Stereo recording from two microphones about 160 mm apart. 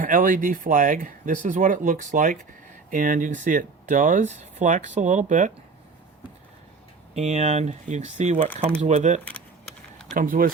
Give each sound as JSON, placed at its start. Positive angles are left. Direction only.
{"t": 0.0, "sound": "speech", "side_deg": -60}
{"t": 7.2, "sound": "speech", "side_deg": -45}
{"t": 10.2, "sound": "speech", "side_deg": -60}